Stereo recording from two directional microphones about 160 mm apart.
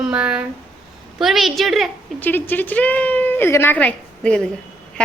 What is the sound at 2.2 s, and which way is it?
Speech, 10° left (ahead or behind).